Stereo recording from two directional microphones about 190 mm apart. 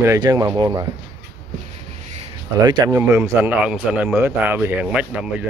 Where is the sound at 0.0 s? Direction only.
20° right (ahead or behind).